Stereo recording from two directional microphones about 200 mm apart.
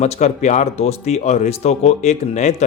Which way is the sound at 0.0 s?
35° left (ahead or behind).